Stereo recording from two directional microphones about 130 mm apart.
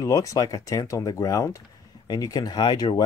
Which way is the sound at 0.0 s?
25° left (ahead or behind).